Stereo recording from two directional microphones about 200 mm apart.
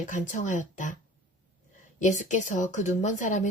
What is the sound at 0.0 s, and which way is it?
Speech, 40° left (ahead or behind).